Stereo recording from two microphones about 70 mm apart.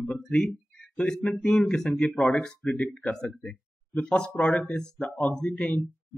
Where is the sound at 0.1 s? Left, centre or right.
Centre.